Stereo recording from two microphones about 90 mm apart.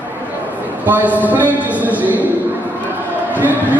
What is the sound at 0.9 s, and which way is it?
A man's voice, 20° right (ahead or behind).